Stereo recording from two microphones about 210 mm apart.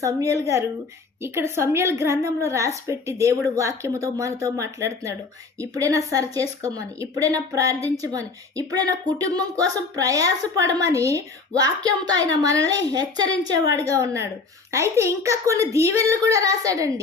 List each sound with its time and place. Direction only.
0.0 s a woman's voice: 15° right (ahead or behind)